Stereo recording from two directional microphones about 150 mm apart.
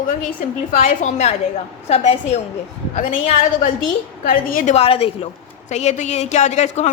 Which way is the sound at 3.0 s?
60° left (ahead or behind).